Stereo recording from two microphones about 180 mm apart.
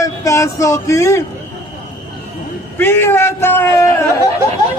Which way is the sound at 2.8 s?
15° left (ahead or behind).